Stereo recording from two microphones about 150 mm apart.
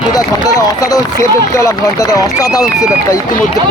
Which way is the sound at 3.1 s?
20° left (ahead or behind).